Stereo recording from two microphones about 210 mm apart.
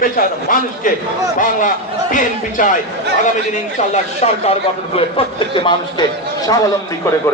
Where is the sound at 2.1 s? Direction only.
40° left (ahead or behind).